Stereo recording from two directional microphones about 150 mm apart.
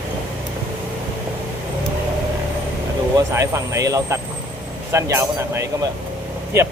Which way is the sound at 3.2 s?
20° right (ahead or behind).